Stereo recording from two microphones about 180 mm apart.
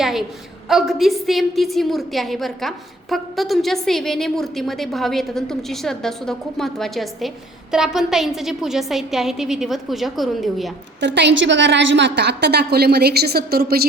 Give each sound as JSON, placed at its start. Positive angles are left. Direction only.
{"t": 0.0, "sound": "a woman's voice", "side_deg": 0}
{"t": 11.0, "sound": "a woman's voice", "side_deg": -75}